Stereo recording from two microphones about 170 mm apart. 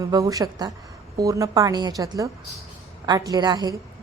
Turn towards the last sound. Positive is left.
turn(degrees=-25)  # may be behind; listen again after turning